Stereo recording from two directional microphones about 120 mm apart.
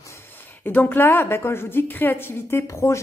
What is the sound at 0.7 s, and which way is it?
Speech, 15° left (ahead or behind).